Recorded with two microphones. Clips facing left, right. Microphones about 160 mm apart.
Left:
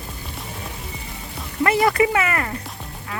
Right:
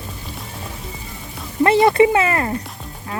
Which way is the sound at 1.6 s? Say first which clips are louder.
Right 5 dB; 25° right (ahead or behind).